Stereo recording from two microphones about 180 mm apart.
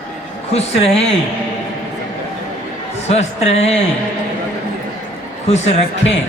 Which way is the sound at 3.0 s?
35° left (ahead or behind).